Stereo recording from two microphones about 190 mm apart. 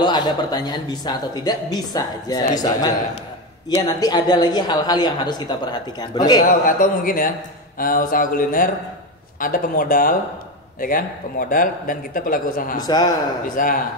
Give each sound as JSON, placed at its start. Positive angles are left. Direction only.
{"t": 0.0, "sound": "a woman's voice", "side_deg": 20}
{"t": 6.4, "sound": "a man's voice", "side_deg": 45}
{"t": 12.8, "sound": "a woman's voice", "side_deg": 20}
{"t": 13.6, "sound": "a man's voice", "side_deg": 45}